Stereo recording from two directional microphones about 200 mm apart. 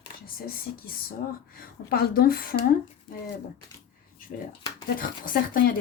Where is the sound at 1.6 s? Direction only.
50° left (ahead or behind).